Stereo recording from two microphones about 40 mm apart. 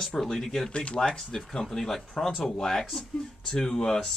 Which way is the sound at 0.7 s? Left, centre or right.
Left.